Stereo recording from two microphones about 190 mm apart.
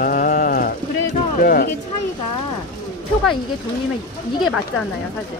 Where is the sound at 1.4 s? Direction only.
50° left (ahead or behind).